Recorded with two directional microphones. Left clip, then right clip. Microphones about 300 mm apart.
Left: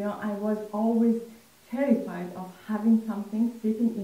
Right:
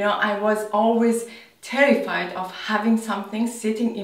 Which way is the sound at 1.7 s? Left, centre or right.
Centre.